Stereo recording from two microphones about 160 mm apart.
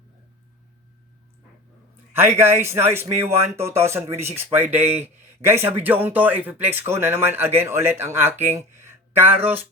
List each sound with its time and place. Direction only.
2.1 s a man's voice: 15° right (ahead or behind)